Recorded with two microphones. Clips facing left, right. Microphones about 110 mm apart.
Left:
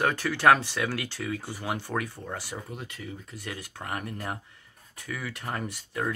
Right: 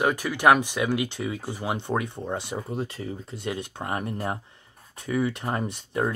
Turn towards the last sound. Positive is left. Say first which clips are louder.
# right 4 dB
turn(degrees=-25)  # may be behind; listen again after turning